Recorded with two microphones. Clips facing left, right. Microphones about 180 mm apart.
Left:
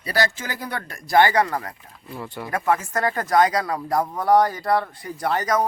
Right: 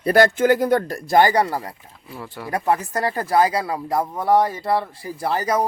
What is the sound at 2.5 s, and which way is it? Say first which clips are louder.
Speech: right 1 dB; 35° right (ahead or behind).